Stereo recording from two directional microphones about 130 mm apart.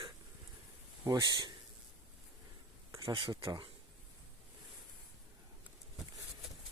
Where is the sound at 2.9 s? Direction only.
25° right (ahead or behind).